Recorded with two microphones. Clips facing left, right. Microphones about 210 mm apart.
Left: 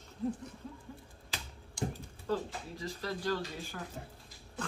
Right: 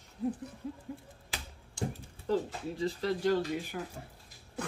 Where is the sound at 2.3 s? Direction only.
25° right (ahead or behind).